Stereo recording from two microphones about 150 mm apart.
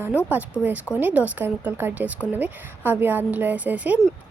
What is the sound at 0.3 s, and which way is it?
Speech, 10° right (ahead or behind).